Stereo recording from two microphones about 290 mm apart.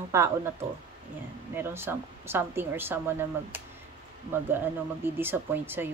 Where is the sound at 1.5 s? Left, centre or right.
Centre.